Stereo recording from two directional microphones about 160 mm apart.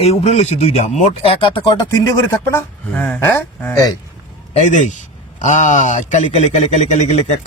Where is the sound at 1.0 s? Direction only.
35° left (ahead or behind).